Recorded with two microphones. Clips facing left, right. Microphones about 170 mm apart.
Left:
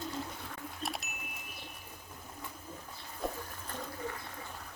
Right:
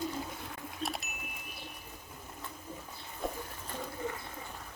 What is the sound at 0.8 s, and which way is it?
Chime, centre (ahead or behind).